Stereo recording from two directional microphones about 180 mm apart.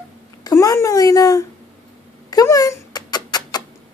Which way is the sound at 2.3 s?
20° left (ahead or behind).